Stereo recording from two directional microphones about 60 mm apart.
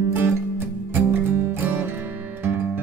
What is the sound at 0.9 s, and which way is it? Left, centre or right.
Music, right.